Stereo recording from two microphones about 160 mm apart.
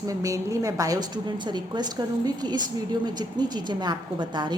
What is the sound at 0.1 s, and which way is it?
A woman's voice, 20° right (ahead or behind).